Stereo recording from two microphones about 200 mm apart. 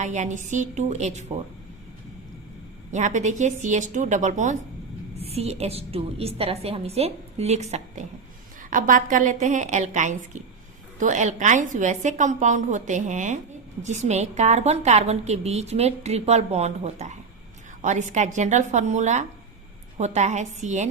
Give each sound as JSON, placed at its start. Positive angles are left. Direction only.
{"t": 0.0, "sound": "a woman's voice", "side_deg": -35}
{"t": 2.9, "sound": "a woman's voice", "side_deg": -35}